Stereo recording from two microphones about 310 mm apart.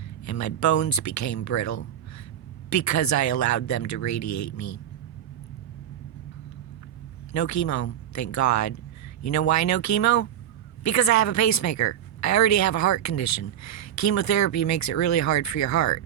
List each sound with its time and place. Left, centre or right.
0.3 s a woman's voice: left
7.3 s a woman's voice: left